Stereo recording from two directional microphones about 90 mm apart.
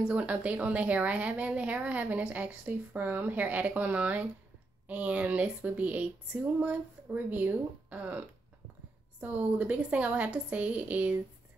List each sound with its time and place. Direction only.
0.1 s a woman's voice: 15° right (ahead or behind)